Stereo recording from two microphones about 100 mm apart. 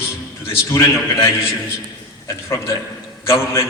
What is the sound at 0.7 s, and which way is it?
A man's voice, 30° left (ahead or behind).